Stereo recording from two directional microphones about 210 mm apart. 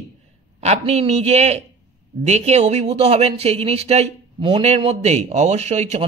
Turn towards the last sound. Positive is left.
turn(degrees=-30)  # may be behind; listen again after turning